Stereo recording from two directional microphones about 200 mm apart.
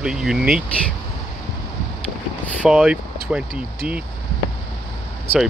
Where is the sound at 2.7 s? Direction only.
5° right (ahead or behind).